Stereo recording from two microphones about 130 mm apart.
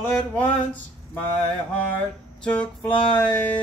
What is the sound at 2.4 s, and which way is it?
Mantra, 10° left (ahead or behind).